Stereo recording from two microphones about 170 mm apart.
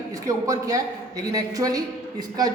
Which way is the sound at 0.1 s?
20° right (ahead or behind).